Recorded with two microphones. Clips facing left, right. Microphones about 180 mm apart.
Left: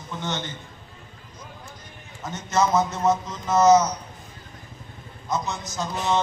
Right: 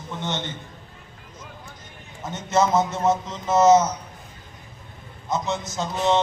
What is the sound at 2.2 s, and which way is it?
A man's voice, 25° right (ahead or behind).